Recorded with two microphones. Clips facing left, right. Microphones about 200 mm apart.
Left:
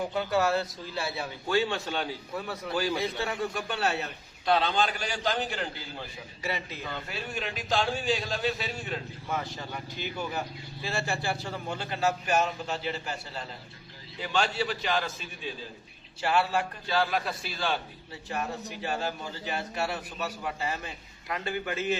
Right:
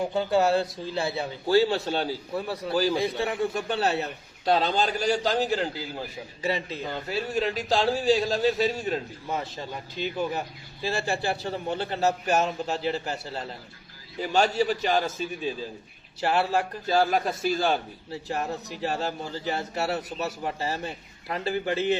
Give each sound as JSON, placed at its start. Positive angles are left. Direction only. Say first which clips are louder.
{"t": 0.0, "sound": "a man's voice", "louder": "right 4 dB", "side_deg": -30}
{"t": 3.7, "sound": "a man's voice", "louder": "right 4 dB", "side_deg": -35}
{"t": 9.3, "sound": "a man's voice", "louder": "right 2 dB", "side_deg": -30}